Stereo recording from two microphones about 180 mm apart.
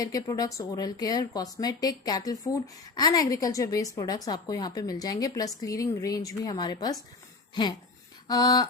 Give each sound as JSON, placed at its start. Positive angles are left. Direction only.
{"t": 0.0, "sound": "a woman's voice", "side_deg": 20}